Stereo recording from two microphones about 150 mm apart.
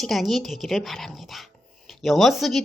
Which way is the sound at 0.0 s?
Centre (ahead or behind).